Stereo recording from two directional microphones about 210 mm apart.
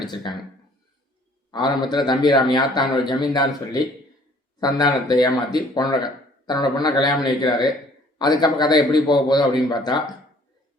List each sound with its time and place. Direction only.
0.0 s speech: 20° left (ahead or behind)
1.5 s speech: 20° left (ahead or behind)